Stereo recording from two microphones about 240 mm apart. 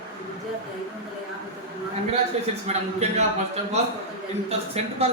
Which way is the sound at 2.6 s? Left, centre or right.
Right.